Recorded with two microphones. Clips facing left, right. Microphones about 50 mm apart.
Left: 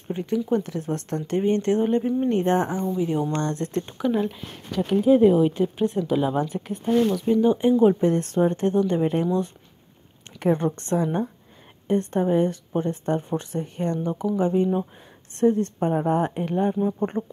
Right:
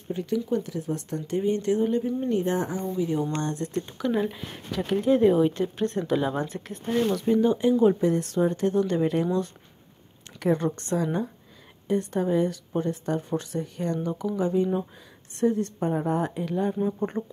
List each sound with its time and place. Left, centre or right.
0.1 s speech: left
0.7 s speech: left
3.4 s speech: left
4.1 s a woman's voice: centre
7.1 s a woman's voice: centre
7.4 s speech: left
8.0 s speech: left
11.9 s speech: left
16.7 s speech: centre